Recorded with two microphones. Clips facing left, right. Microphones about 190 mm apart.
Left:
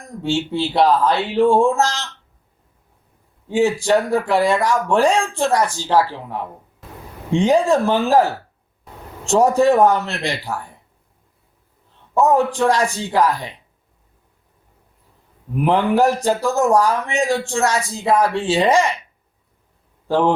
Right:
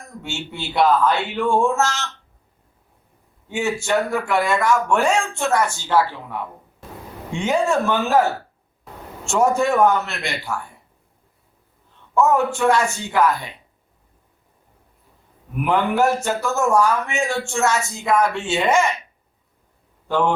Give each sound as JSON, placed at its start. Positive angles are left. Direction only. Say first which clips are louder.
{"t": 0.0, "sound": "a man's voice", "louder": "left 10 dB", "side_deg": 35}
{"t": 3.5, "sound": "a man's voice", "louder": "left 5 dB", "side_deg": 35}
{"t": 12.2, "sound": "a man's voice", "louder": "left 2 dB", "side_deg": 35}
{"t": 15.6, "sound": "a man's voice", "louder": "left 3 dB", "side_deg": 35}
{"t": 20.1, "sound": "a man's voice", "louder": "left 3 dB", "side_deg": 30}